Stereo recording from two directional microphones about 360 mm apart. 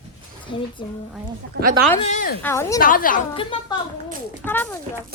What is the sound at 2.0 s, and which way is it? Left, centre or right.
Speech, left.